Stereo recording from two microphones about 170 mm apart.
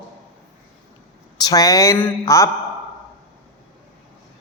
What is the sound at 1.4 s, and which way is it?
Speech, 20° left (ahead or behind).